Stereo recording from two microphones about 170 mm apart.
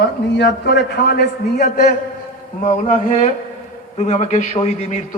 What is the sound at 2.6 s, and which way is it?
A man's voice, 45° left (ahead or behind).